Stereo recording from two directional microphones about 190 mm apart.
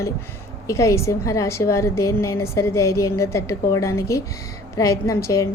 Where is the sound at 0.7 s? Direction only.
15° left (ahead or behind).